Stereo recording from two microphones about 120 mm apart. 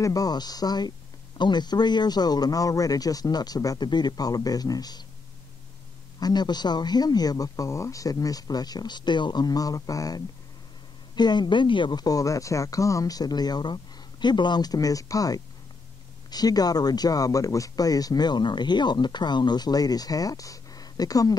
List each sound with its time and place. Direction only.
0.0 s speech: 30° left (ahead or behind)
6.1 s speech: 35° left (ahead or behind)